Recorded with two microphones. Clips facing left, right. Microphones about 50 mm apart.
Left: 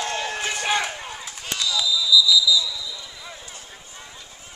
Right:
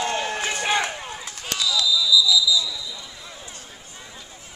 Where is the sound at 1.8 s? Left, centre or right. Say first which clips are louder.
Right 3 dB; centre.